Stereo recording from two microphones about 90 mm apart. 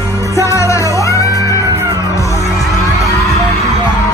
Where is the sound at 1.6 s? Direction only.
35° right (ahead or behind).